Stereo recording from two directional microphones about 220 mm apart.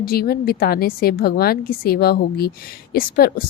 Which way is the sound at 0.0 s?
45° left (ahead or behind).